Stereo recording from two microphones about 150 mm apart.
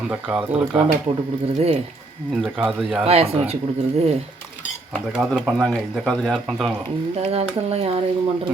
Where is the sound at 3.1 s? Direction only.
40° right (ahead or behind).